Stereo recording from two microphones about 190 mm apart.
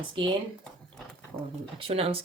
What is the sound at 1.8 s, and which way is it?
Speech, 30° right (ahead or behind).